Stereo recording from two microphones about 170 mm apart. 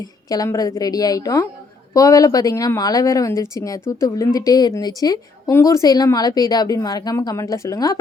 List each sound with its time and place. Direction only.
0.0 s speech: 20° left (ahead or behind)